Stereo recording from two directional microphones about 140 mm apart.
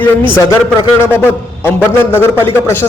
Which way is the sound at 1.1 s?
15° left (ahead or behind).